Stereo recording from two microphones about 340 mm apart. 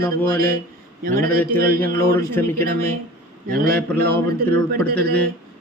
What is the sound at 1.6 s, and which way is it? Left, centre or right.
Speech, centre.